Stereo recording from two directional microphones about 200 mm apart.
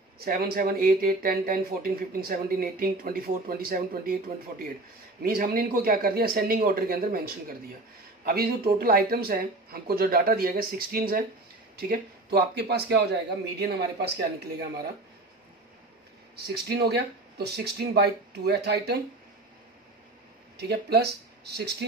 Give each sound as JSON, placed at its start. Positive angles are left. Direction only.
{"t": 0.2, "sound": "speech", "side_deg": -50}
{"t": 5.2, "sound": "speech", "side_deg": -45}
{"t": 16.4, "sound": "speech", "side_deg": -55}
{"t": 20.5, "sound": "speech", "side_deg": -55}